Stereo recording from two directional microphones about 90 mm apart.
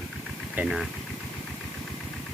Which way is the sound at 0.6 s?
20° right (ahead or behind).